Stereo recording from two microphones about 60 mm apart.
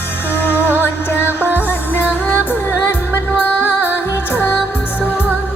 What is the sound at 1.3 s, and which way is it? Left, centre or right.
Music, right.